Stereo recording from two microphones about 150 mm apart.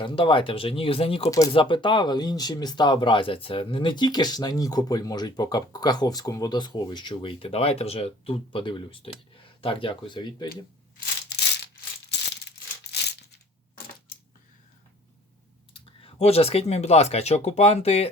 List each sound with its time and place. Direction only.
0.0 s speech: 35° left (ahead or behind)
15.7 s speech: 40° left (ahead or behind)